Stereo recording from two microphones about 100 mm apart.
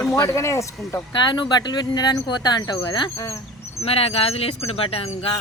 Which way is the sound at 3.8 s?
85° left.